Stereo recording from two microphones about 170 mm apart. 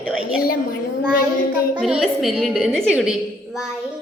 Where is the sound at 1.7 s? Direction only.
5° right (ahead or behind).